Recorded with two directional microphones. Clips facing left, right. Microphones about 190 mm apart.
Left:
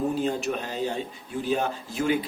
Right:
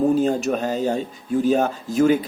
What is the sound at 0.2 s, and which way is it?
Speech, 45° right (ahead or behind).